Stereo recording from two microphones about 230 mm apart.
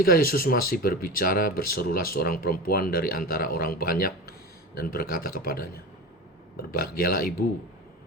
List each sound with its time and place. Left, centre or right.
0.0 s speech: left